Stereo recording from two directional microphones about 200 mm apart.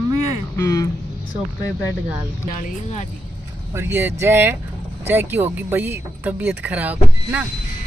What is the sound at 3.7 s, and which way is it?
Speech, 10° right (ahead or behind).